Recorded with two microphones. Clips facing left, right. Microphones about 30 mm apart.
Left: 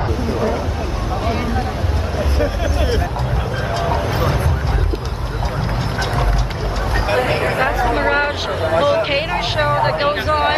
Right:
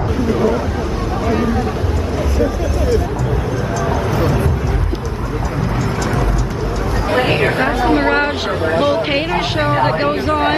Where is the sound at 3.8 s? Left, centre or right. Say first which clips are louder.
Right 2 dB; left.